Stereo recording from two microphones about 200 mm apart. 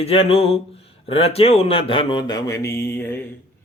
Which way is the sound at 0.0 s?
30° left (ahead or behind).